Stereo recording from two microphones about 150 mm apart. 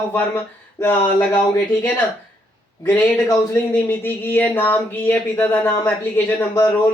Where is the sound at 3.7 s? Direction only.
15° left (ahead or behind).